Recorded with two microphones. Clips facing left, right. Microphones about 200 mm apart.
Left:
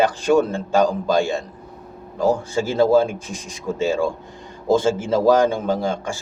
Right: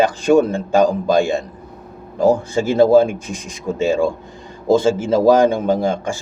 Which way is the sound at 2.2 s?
15° right (ahead or behind).